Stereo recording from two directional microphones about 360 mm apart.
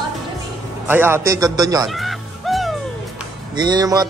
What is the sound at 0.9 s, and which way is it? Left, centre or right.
A man's voice, centre.